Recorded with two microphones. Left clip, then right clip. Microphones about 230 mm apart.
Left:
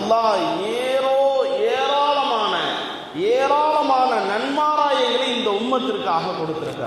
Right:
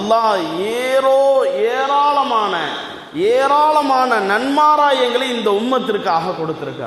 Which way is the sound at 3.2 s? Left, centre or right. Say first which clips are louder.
Right 5 dB; right.